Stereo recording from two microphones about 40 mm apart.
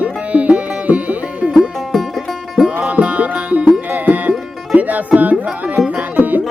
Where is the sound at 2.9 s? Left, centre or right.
Right.